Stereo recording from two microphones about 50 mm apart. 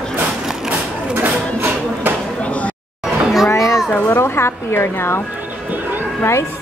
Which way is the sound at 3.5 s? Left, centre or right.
Left.